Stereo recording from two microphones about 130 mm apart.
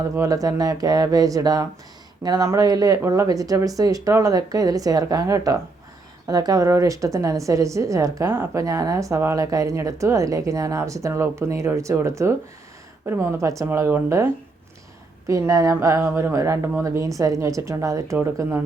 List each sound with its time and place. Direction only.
0.2 s a woman's voice: 25° right (ahead or behind)